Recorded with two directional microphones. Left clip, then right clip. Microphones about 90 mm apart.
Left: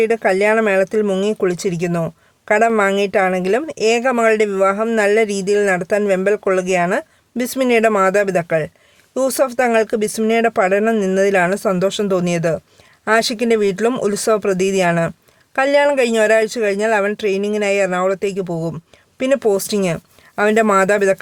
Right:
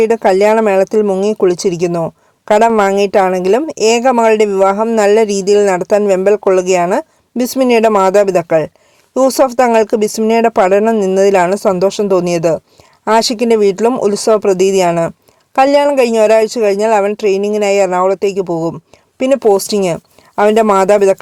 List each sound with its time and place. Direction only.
0.0 s speech: 35° right (ahead or behind)